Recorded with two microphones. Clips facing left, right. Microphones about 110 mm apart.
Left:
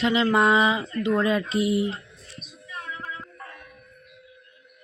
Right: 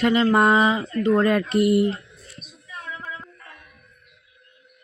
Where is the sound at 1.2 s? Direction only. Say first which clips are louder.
Right 4 dB; 55° right (ahead or behind).